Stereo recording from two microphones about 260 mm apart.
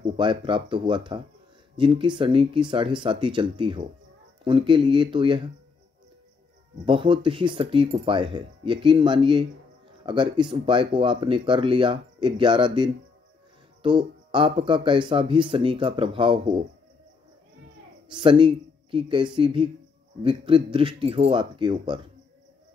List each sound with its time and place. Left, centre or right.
0.0 s speech: centre
6.9 s speech: centre
18.1 s speech: centre